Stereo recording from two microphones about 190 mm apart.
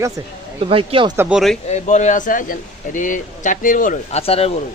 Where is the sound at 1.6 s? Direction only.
40° left (ahead or behind).